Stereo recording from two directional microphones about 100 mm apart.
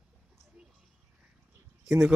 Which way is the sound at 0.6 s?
10° right (ahead or behind).